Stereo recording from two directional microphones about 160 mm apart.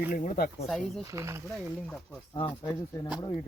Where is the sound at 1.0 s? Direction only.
20° right (ahead or behind).